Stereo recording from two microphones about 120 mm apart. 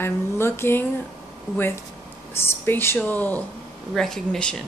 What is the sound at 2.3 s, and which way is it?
A woman's voice, 20° left (ahead or behind).